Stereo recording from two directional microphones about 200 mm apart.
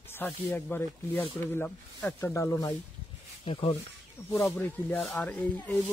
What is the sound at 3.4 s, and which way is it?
Speech, 25° left (ahead or behind).